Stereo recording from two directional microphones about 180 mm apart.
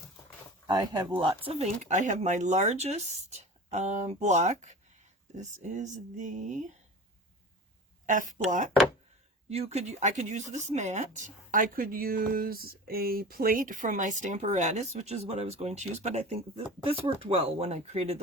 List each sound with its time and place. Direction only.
0.7 s speech: 20° right (ahead or behind)
1.5 s speech: 40° right (ahead or behind)
8.0 s speech: 45° right (ahead or behind)
9.5 s speech: 35° right (ahead or behind)